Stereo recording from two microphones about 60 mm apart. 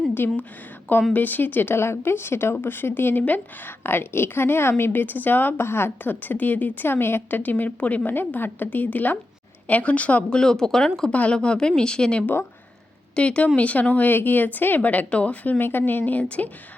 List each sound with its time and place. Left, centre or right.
1.1 s a woman's voice: left; by 11.1 s centre
11.1 s speech: centre